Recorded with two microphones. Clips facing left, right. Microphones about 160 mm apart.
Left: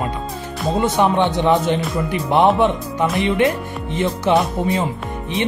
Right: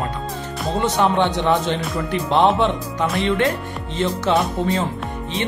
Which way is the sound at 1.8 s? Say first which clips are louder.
Left 2 dB; centre (ahead or behind).